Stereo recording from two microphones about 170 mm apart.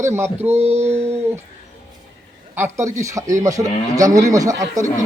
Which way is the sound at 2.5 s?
15° right (ahead or behind).